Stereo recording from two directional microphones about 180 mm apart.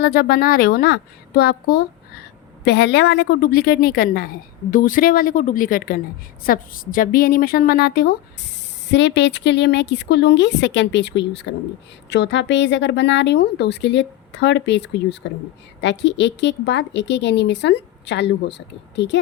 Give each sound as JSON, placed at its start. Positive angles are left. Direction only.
{"t": 0.0, "sound": "a woman's voice", "side_deg": 60}
{"t": 8.9, "sound": "speech", "side_deg": 75}